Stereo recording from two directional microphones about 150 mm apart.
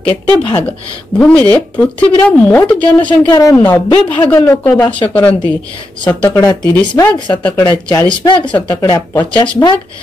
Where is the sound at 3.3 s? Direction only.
25° left (ahead or behind).